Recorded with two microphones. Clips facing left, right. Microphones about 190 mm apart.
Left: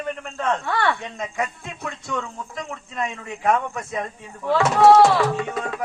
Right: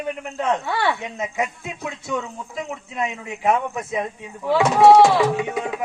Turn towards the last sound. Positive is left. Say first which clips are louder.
# right 2 dB
turn(degrees=-10)  # may be behind; listen again after turning